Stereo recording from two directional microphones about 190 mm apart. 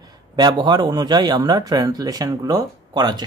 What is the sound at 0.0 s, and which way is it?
A man's voice, 20° right (ahead or behind).